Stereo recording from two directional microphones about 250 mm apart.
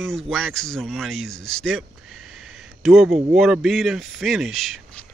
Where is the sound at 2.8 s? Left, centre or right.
Centre.